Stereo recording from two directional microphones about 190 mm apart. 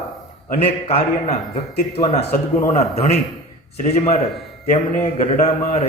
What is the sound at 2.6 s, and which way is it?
A man's voice, 35° left (ahead or behind).